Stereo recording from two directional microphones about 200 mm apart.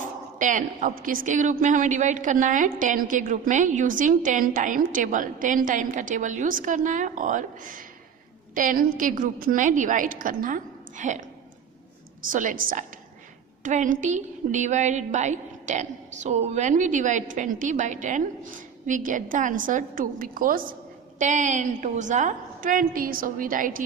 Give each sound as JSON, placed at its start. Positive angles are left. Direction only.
{"t": 0.0, "sound": "a woman's voice", "side_deg": -40}